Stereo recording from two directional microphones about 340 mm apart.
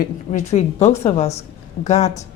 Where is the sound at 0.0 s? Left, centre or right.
Left.